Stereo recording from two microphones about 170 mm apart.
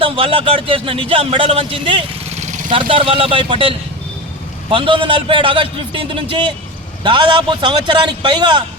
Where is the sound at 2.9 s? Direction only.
30° right (ahead or behind).